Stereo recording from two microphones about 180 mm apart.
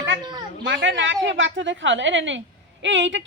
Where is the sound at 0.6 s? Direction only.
90° right.